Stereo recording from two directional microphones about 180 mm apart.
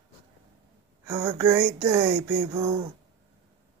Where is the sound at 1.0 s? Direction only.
15° right (ahead or behind).